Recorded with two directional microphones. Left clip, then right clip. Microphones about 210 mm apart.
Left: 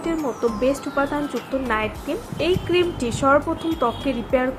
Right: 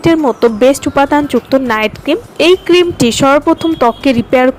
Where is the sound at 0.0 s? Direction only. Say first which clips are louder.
Right 13 dB; 45° right (ahead or behind).